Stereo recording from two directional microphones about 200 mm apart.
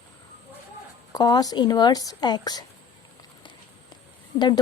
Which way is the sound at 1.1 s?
20° left (ahead or behind).